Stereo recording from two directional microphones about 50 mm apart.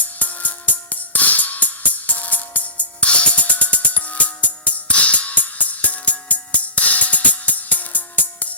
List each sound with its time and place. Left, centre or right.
0.2 s music: left